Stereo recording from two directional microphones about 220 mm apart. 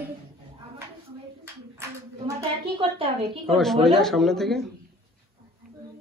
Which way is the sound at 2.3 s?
25° right (ahead or behind).